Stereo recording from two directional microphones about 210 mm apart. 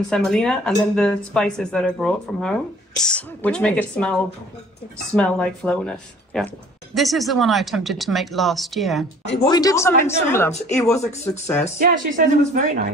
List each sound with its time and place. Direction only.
0.1 s speech: centre (ahead or behind)
9.4 s speech: 20° left (ahead or behind)
11.8 s speech: 40° right (ahead or behind)